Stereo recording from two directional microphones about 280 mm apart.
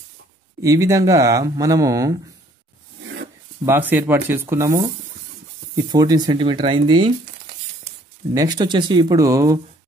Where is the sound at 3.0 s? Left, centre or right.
Right.